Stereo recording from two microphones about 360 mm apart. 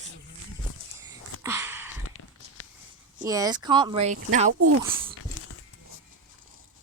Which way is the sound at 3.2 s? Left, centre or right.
Centre.